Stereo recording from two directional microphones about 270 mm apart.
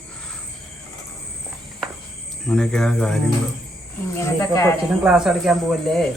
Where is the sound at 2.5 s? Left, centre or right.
Centre.